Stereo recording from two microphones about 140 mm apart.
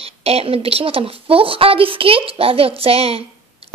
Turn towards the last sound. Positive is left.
turn(degrees=-45)  # may be behind; listen again after turning